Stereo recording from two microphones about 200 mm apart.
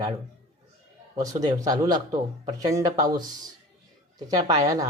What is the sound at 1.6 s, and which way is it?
A woman's voice, 20° right (ahead or behind).